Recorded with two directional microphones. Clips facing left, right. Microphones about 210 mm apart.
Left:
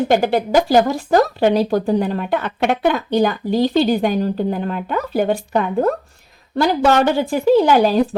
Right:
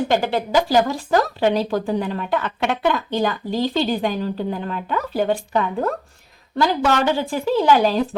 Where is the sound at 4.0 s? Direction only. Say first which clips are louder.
Left 5 dB; 45° left (ahead or behind).